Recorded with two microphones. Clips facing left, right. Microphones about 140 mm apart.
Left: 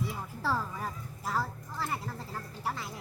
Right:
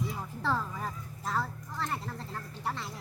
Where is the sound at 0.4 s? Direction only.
5° left (ahead or behind).